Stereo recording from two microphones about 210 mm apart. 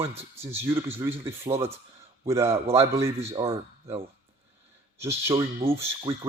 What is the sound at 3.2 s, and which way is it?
Speech, 30° right (ahead or behind).